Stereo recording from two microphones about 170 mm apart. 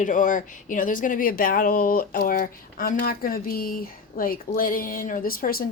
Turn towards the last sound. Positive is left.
turn(degrees=60)  # may be behind; listen again after turning